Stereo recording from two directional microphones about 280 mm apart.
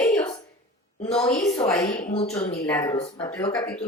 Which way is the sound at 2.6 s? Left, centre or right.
Centre.